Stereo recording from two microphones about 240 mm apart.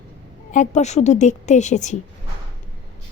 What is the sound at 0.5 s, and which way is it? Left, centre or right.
A woman's voice, left.